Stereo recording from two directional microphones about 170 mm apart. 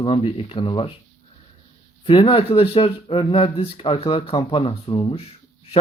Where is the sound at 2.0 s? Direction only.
30° left (ahead or behind).